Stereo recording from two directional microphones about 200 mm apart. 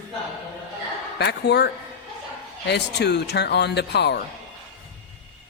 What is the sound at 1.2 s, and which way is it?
Speech, 55° left (ahead or behind).